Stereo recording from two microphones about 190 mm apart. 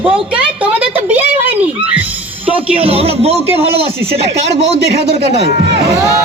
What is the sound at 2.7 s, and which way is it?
Speech, 30° right (ahead or behind).